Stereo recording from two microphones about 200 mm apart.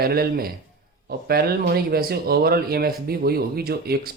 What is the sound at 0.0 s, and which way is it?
Speech, 50° right (ahead or behind).